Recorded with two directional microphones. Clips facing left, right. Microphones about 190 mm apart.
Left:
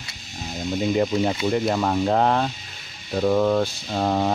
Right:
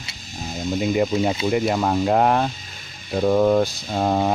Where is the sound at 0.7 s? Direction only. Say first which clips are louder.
Right 1 dB; 5° right (ahead or behind).